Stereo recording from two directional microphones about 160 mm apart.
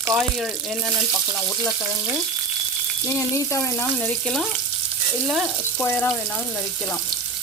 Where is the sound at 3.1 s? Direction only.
20° left (ahead or behind).